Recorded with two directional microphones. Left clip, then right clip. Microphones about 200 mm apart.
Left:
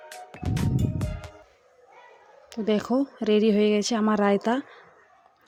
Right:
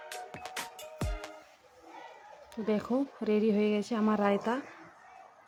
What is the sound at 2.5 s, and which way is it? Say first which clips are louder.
Speech: left 7 dB; 25° left (ahead or behind).